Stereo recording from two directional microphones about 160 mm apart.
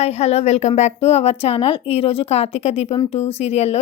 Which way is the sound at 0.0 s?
40° left (ahead or behind).